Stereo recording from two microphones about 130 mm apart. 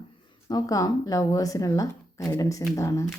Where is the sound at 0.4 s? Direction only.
25° left (ahead or behind).